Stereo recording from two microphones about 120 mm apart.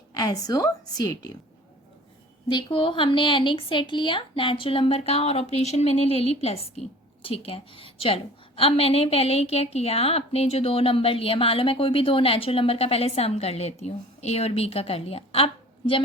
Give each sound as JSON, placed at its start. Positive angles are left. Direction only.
{"t": 0.1, "sound": "a woman's voice", "side_deg": 30}
{"t": 2.5, "sound": "a woman's voice", "side_deg": 45}